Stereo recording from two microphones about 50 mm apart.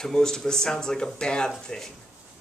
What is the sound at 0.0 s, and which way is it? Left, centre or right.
Speech, centre.